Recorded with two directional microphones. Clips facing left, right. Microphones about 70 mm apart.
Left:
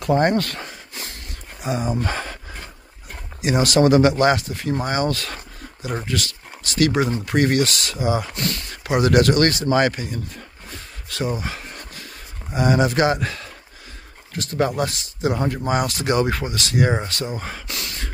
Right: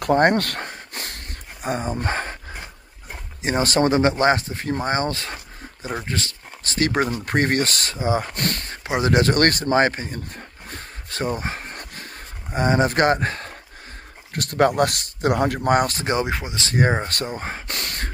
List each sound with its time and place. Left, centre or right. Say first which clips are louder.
0.0 s a sound: right 1 dB; right
2.0 s speech: even; right
3.4 s speech: left 3 dB; right
8.4 s speech: even; right
8.8 s speech: left 3 dB; right
9.3 s speech: left 1 dB; right
10.7 s a sound: right 1 dB; right
12.5 s speech: left 1 dB; right
14.3 s speech: right 3 dB; right
15.8 s speech: left 2 dB; right; by 16.6 s centre
16.6 s speech: right 1 dB; right
17.6 s a sound: right 2 dB; right